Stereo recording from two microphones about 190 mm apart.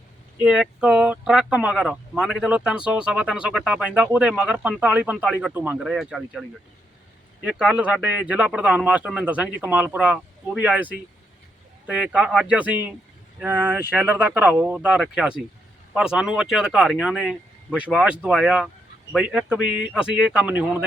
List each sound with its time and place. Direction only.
0.4 s speech: 5° right (ahead or behind)
7.4 s speech: 5° right (ahead or behind)
11.9 s speech: 5° right (ahead or behind)